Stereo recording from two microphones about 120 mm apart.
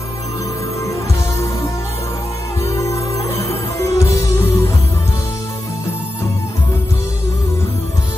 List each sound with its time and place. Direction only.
2.6 s music: 25° left (ahead or behind)